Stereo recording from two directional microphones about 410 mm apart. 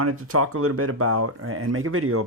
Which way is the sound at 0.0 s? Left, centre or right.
Right.